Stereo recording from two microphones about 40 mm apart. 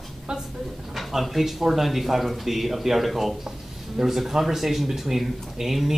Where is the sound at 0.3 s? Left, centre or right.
Right.